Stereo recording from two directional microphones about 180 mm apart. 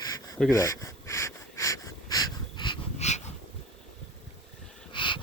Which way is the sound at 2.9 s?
40° left (ahead or behind).